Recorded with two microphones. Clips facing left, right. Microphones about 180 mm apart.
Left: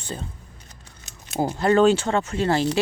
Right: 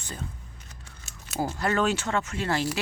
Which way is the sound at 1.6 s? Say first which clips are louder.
Left 10 dB; 30° left (ahead or behind).